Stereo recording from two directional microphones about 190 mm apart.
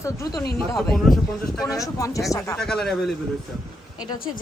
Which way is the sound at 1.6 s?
20° left (ahead or behind).